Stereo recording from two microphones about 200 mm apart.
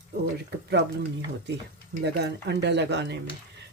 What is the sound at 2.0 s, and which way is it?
Speech, 60° right (ahead or behind).